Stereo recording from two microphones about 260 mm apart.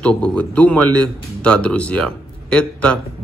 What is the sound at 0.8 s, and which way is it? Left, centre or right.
Speech, right.